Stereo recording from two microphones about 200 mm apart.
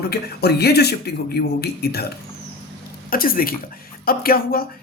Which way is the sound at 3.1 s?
45° left (ahead or behind).